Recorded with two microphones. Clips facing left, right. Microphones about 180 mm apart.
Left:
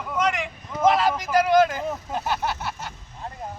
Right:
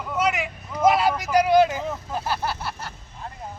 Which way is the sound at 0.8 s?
10° right (ahead or behind).